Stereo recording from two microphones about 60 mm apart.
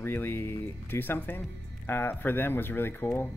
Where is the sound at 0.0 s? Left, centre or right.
Left.